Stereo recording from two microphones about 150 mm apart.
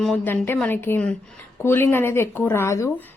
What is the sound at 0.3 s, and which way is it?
A woman's voice, 15° left (ahead or behind).